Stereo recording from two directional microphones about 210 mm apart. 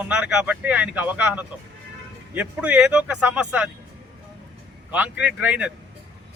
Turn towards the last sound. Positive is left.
turn(degrees=-5)  # may be behind; listen again after turning